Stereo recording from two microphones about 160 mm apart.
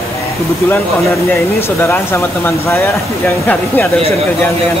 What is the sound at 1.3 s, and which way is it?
Speech, 15° left (ahead or behind).